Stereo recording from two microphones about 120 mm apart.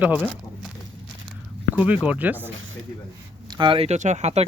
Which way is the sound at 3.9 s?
75° right (ahead or behind).